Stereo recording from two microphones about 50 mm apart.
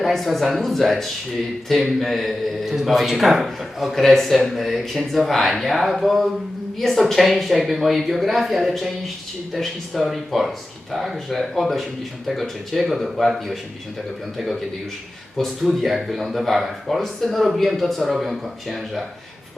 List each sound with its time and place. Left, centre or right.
0.0 s a man's voice: centre
3.9 s a man's voice: centre